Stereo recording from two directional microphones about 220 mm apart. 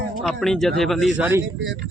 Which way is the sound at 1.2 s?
10° right (ahead or behind).